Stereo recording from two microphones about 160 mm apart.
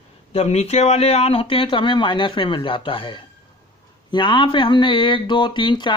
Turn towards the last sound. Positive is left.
turn(degrees=30)  # may be behind; listen again after turning